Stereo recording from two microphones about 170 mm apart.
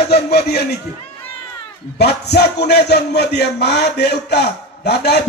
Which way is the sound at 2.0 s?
70° left (ahead or behind).